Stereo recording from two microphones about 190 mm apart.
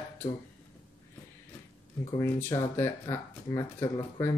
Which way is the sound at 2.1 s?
15° left (ahead or behind).